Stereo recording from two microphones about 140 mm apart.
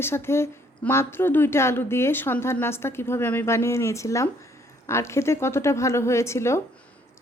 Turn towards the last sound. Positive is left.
turn(degrees=20)  # may be behind; listen again after turning